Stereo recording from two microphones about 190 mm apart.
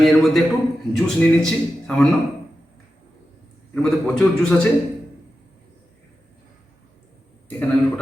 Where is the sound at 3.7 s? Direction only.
5° left (ahead or behind).